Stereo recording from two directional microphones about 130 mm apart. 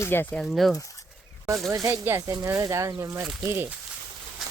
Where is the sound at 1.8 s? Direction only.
20° right (ahead or behind).